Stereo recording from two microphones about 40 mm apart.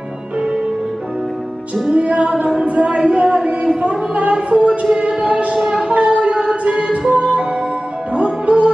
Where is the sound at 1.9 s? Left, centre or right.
Right.